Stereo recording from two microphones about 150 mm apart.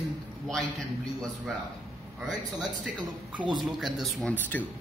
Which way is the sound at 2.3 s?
5° right (ahead or behind).